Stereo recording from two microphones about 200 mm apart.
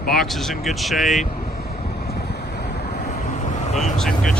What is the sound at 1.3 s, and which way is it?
Vehicle, 50° left (ahead or behind).